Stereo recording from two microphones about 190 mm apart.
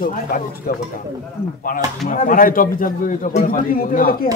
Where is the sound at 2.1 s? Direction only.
45° left (ahead or behind).